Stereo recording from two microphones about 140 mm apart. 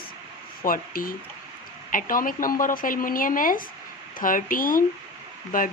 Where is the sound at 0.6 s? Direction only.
90° left.